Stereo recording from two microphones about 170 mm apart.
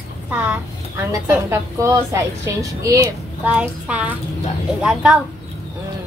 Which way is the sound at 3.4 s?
5° right (ahead or behind).